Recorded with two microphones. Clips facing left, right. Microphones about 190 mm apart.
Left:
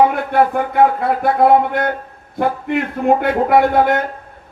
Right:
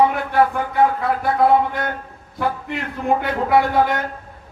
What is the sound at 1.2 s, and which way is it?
Speech, 55° left (ahead or behind).